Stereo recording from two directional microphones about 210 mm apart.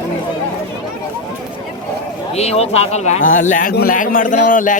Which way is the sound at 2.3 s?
30° left (ahead or behind).